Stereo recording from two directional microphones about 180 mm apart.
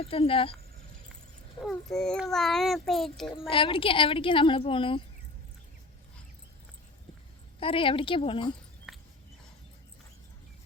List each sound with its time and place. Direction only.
0.0 s speech: 30° left (ahead or behind)
1.6 s a child's voice: centre (ahead or behind)
3.3 s speech: 30° left (ahead or behind)
7.6 s speech: 30° left (ahead or behind)
8.9 s a sound: 5° right (ahead or behind)